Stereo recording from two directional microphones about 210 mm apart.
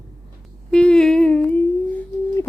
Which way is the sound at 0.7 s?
5° left (ahead or behind).